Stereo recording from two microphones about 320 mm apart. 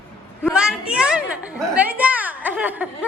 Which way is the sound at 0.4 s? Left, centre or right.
Centre.